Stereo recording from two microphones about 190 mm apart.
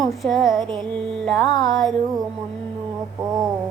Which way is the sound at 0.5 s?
25° right (ahead or behind).